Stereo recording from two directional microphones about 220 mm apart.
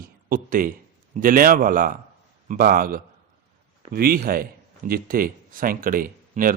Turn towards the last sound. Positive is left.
turn(degrees=-40)  # may be behind; listen again after turning